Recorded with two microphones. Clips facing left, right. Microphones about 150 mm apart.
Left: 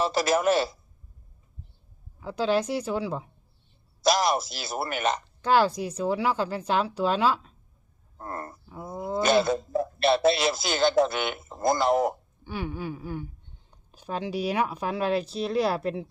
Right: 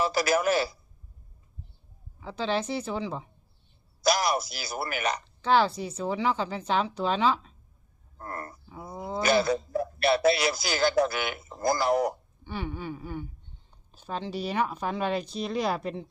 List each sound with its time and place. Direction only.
0.0 s speech: 25° left (ahead or behind)
2.2 s speech: 10° left (ahead or behind)
4.0 s speech: 25° left (ahead or behind)
5.4 s speech: 10° left (ahead or behind)
8.2 s speech: 25° left (ahead or behind)
8.7 s speech: centre (ahead or behind)
9.2 s speech: 25° left (ahead or behind)
12.5 s speech: 10° left (ahead or behind)